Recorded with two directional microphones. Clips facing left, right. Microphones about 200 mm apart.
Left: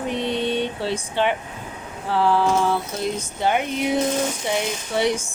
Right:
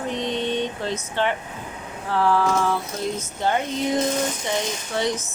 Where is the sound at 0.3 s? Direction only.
10° left (ahead or behind).